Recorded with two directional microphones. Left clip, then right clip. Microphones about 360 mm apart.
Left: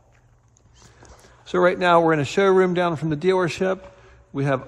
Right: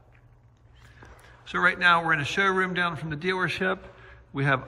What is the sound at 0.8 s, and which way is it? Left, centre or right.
Speech, centre.